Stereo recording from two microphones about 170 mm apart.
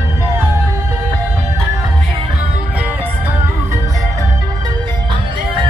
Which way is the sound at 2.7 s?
10° right (ahead or behind).